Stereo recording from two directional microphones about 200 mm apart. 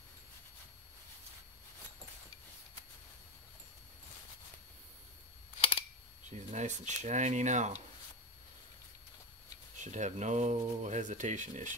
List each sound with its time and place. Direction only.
6.3 s speech: 35° right (ahead or behind)
9.8 s speech: 35° right (ahead or behind)